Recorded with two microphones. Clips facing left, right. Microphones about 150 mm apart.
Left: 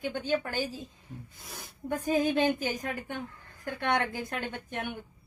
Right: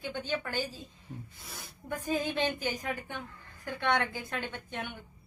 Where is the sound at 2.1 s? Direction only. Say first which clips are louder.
Left 5 dB; 45° left (ahead or behind).